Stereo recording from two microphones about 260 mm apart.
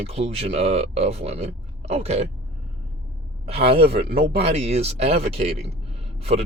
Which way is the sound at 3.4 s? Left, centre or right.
Right.